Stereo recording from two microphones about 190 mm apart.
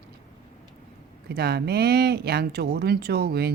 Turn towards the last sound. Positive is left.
turn(degrees=-55)  # may be behind; listen again after turning